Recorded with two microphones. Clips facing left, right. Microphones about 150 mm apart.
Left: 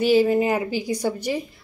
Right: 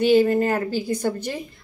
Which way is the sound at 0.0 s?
5° left (ahead or behind).